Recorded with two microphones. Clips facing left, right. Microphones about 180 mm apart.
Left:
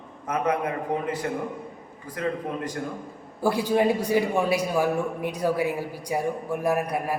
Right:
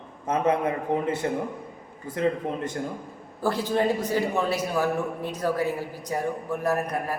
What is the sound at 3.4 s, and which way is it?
A man's voice, 10° left (ahead or behind).